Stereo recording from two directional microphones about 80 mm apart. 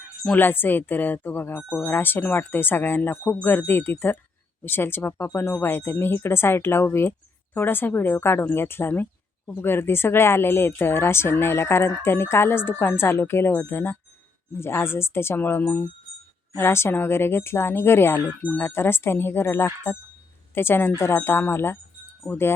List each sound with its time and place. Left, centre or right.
0.3 s speech: left